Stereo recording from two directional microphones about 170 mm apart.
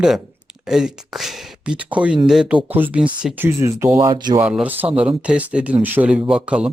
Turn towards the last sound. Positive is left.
turn(degrees=-5)  # may be behind; listen again after turning